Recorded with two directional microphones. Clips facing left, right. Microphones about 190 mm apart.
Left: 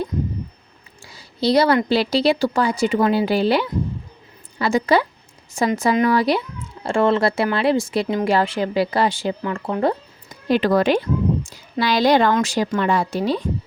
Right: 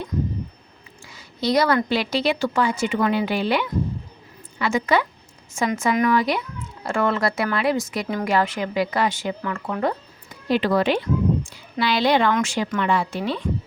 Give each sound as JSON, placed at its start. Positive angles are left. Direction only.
{"t": 1.0, "sound": "a woman's voice", "side_deg": 30}
{"t": 10.5, "sound": "a woman's voice", "side_deg": 45}